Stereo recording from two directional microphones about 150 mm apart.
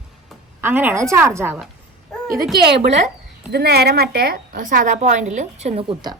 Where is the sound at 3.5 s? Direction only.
90° right; by 6.0 s 45° right (ahead or behind).